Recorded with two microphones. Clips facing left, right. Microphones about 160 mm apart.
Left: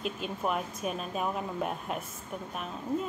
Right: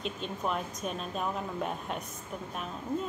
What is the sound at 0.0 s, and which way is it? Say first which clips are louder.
A woman's voice: left 2 dB; 5° left (ahead or behind).